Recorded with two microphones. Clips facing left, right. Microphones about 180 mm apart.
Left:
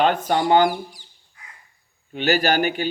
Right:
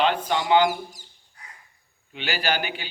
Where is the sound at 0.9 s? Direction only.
45° right (ahead or behind).